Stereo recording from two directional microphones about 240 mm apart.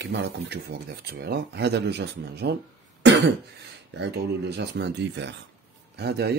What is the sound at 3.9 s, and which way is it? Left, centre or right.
Speech, right.